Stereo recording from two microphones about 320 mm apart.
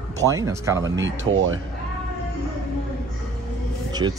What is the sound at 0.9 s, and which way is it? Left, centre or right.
Speech, right.